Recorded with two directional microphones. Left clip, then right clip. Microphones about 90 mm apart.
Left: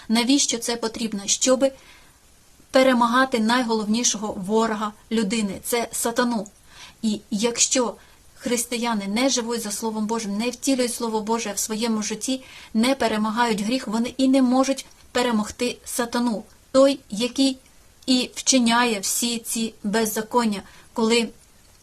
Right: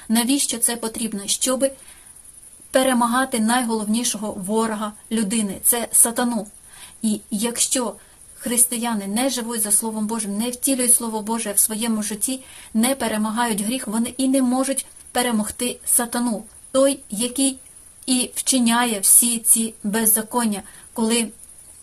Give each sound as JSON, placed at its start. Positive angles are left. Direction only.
{"t": 0.1, "sound": "a woman's voice", "side_deg": 30}
{"t": 2.7, "sound": "a woman's voice", "side_deg": 30}